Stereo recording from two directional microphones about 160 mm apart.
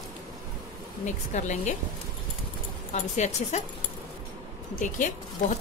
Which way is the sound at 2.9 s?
45° left (ahead or behind).